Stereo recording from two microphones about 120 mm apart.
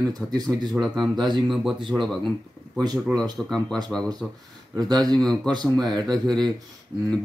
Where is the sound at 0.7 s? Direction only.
Centre (ahead or behind).